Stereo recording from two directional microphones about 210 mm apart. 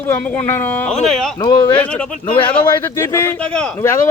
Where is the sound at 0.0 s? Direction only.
10° left (ahead or behind).